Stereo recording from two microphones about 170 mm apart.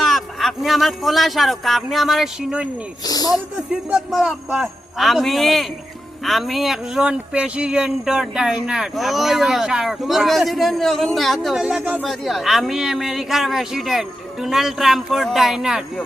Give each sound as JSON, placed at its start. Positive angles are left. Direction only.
{"t": 0.0, "sound": "speech", "side_deg": 0}
{"t": 3.0, "sound": "speech", "side_deg": 20}
{"t": 3.7, "sound": "speech", "side_deg": -5}